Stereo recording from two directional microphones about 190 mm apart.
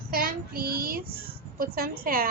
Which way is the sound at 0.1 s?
50° right (ahead or behind).